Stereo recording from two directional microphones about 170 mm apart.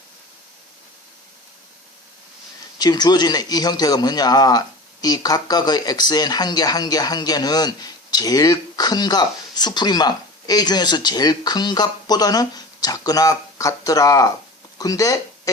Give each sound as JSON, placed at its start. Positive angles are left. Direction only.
{"t": 2.7, "sound": "speech", "side_deg": 25}